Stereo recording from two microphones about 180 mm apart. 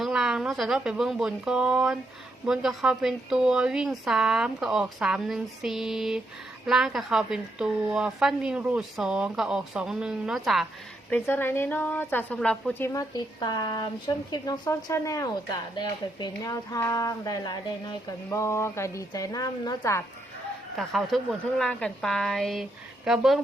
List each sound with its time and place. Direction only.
0.0 s a woman's voice: centre (ahead or behind)
11.1 s a woman's voice: 10° left (ahead or behind)
12.9 s speech: 20° left (ahead or behind)
20.7 s a woman's voice: centre (ahead or behind)